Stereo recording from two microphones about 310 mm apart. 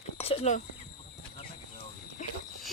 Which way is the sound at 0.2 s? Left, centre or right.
Left.